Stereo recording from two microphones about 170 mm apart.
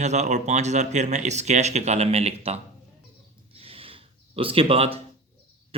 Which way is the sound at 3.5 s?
35° right (ahead or behind).